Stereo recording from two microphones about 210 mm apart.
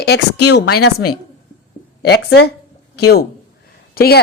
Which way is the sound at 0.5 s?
50° left (ahead or behind).